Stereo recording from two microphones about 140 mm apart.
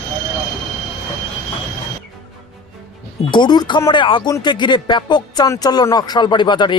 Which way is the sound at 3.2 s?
30° left (ahead or behind).